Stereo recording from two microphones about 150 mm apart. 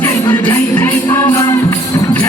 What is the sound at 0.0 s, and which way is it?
Music, 10° left (ahead or behind).